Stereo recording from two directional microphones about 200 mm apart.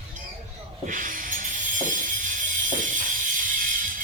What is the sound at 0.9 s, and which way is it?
Music, 40° right (ahead or behind).